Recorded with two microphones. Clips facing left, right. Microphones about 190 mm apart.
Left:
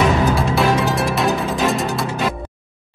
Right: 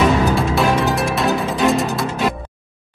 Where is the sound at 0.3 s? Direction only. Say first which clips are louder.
Even; centre (ahead or behind).